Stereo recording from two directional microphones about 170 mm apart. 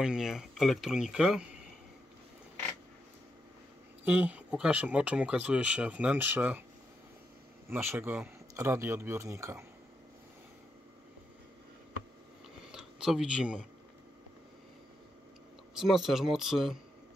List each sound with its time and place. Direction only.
0.0 s speech: 5° right (ahead or behind)
4.0 s speech: 10° right (ahead or behind)
7.7 s speech: 15° right (ahead or behind)
12.7 s speech: 5° right (ahead or behind)
15.8 s speech: centre (ahead or behind)